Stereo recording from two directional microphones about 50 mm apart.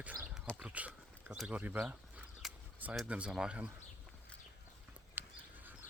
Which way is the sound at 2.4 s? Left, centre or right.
Centre.